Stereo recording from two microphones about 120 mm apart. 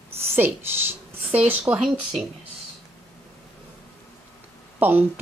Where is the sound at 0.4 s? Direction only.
20° right (ahead or behind).